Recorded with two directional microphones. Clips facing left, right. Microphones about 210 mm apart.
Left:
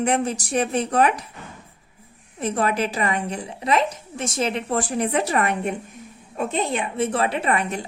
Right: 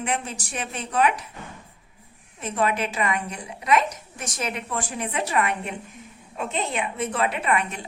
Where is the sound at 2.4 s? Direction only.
35° left (ahead or behind).